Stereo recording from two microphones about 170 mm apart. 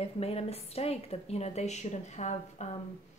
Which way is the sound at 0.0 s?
35° left (ahead or behind).